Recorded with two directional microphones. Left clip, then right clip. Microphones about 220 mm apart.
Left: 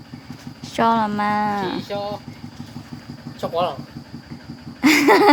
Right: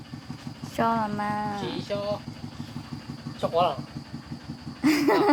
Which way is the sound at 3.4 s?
40° left (ahead or behind).